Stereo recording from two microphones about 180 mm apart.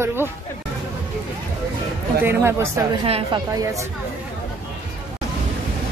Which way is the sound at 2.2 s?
15° right (ahead or behind).